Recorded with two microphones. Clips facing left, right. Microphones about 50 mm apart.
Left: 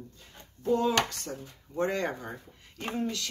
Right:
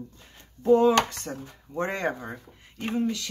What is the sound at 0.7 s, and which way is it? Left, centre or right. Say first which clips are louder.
Speech: right 7 dB; right.